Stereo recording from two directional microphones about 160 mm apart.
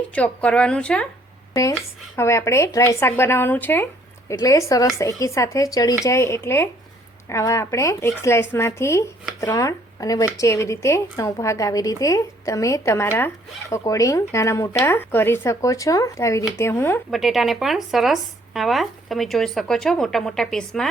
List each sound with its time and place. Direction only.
0.1 s speech: 10° left (ahead or behind)
2.1 s speech: 15° left (ahead or behind)
17.1 s speech: centre (ahead or behind)